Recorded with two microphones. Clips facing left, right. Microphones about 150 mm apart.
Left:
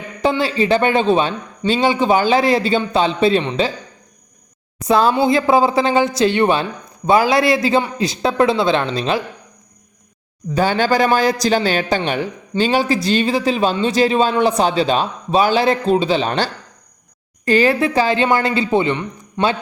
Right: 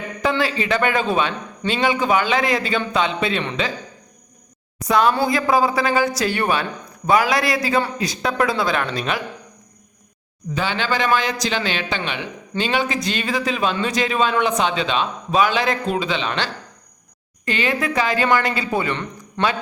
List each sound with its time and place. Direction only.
0.2 s a man's voice: 30° left (ahead or behind)
4.8 s speech: 30° left (ahead or behind)
10.5 s a man's voice: 40° left (ahead or behind); by 19.5 s 25° left (ahead or behind)